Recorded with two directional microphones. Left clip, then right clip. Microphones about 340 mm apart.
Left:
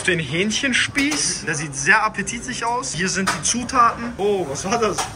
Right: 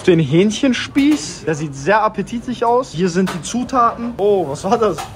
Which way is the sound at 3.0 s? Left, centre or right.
Centre.